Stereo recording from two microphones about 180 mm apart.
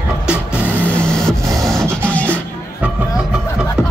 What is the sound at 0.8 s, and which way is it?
Printer, 5° left (ahead or behind).